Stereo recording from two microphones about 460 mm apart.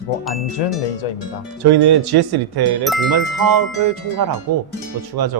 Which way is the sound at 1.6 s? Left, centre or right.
Right.